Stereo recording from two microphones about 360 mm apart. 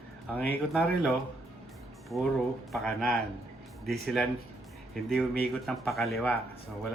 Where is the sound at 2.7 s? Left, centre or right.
Centre.